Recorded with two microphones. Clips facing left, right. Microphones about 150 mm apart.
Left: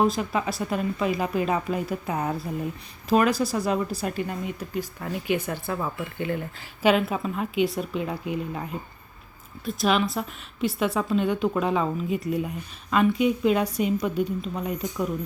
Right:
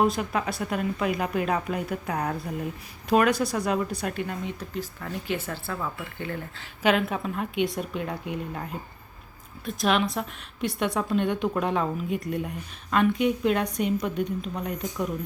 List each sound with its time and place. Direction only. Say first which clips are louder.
0.0 s a woman's voice: left 1 dB; centre (ahead or behind); by 6.7 s 15° left (ahead or behind)
6.8 s a woman's voice: left 2 dB; 5° left (ahead or behind)
9.6 s a woman's voice: left 1 dB; centre (ahead or behind)